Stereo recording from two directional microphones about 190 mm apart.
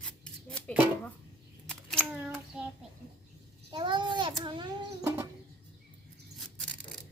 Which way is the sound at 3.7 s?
25° right (ahead or behind).